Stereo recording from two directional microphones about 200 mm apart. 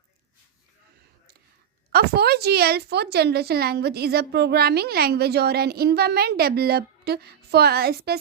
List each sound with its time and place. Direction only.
1.9 s a woman's voice: 55° right (ahead or behind)